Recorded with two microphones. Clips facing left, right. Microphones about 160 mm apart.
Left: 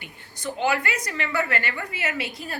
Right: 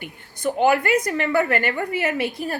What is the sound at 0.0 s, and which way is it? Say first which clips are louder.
Speech: right 8 dB; 55° right (ahead or behind).